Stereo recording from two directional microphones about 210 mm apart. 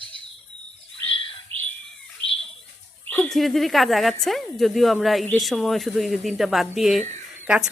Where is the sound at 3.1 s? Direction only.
5° left (ahead or behind).